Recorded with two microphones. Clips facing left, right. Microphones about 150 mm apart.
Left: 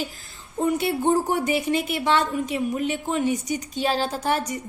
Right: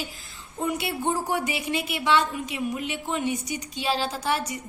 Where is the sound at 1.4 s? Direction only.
45° left (ahead or behind).